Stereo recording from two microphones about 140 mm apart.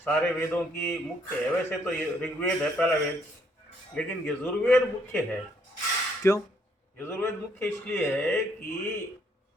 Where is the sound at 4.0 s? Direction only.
10° left (ahead or behind).